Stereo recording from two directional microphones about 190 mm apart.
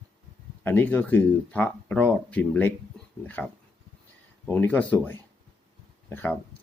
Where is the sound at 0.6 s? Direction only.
10° left (ahead or behind).